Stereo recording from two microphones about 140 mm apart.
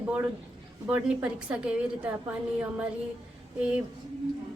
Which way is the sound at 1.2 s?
5° right (ahead or behind).